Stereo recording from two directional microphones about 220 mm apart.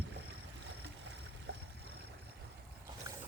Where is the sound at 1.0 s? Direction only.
50° right (ahead or behind).